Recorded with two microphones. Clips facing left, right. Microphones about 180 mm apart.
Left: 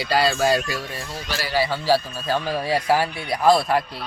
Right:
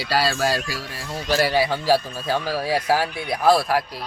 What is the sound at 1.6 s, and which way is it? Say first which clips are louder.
Speech: right 1 dB; 15° right (ahead or behind).